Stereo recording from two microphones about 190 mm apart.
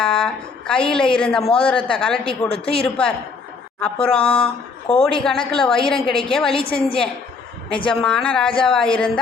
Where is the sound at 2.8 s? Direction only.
5° left (ahead or behind).